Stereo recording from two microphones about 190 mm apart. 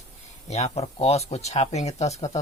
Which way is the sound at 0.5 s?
35° left (ahead or behind).